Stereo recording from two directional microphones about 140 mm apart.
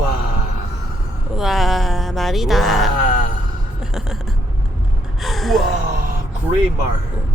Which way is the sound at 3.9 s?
Centre (ahead or behind).